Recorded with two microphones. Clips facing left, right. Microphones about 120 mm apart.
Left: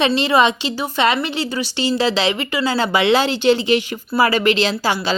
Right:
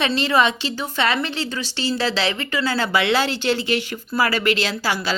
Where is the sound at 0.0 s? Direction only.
20° left (ahead or behind).